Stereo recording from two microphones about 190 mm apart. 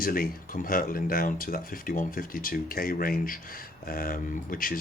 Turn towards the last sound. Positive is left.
turn(degrees=45)  # may be behind; listen again after turning